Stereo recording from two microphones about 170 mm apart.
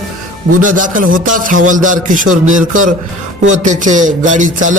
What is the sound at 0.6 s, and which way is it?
A man's voice, 50° right (ahead or behind).